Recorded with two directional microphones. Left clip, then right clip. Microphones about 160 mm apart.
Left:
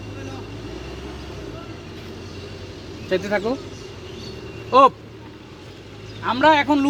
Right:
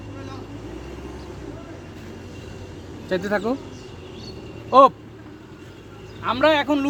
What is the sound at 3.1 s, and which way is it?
Speech, 70° right (ahead or behind).